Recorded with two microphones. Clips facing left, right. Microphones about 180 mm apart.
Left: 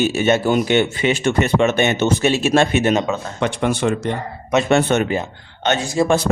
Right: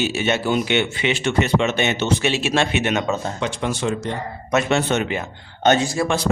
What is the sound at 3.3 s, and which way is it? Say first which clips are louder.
Speech: left 4 dB; 60° left (ahead or behind).